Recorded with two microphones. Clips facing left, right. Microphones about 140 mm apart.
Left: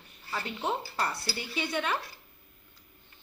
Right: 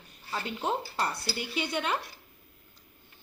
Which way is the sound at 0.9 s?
20° right (ahead or behind).